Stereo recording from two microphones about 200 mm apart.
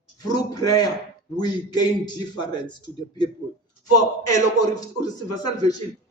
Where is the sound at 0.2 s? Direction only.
20° left (ahead or behind).